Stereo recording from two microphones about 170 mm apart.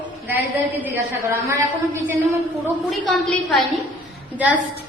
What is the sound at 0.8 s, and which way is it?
Speech, 15° right (ahead or behind).